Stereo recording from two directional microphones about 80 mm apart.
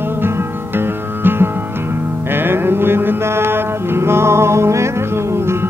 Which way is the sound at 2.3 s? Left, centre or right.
Right.